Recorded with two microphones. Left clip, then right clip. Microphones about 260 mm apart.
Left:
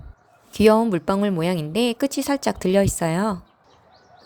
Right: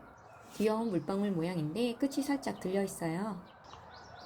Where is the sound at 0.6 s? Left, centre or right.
Left.